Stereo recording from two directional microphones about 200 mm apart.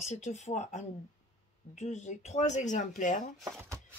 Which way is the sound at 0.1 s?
35° left (ahead or behind).